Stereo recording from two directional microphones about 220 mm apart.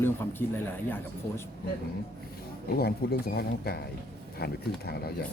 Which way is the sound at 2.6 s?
45° left (ahead or behind).